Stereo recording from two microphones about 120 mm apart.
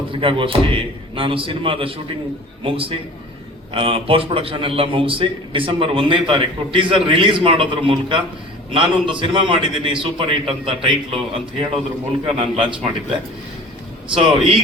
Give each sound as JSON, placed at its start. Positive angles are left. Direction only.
{"t": 0.1, "sound": "a man's voice", "side_deg": -45}
{"t": 12.2, "sound": "a man's voice", "side_deg": -50}
{"t": 14.1, "sound": "a man's voice", "side_deg": -50}